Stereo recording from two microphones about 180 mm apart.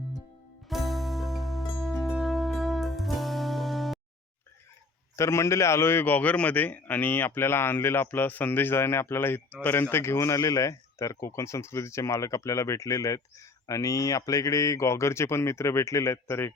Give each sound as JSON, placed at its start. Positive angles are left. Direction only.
{"t": 0.7, "sound": "music", "side_deg": 0}
{"t": 5.1, "sound": "a man's voice", "side_deg": 15}